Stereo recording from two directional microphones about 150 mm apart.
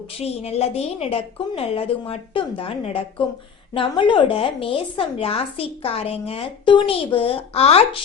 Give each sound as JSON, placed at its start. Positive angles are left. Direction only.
{"t": 0.2, "sound": "speech", "side_deg": 45}